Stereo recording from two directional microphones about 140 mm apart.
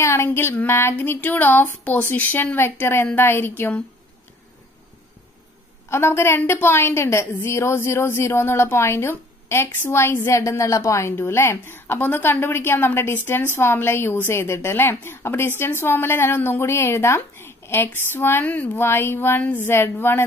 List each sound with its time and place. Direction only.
0.0 s a woman's voice: 20° left (ahead or behind)
5.9 s a woman's voice: 20° left (ahead or behind)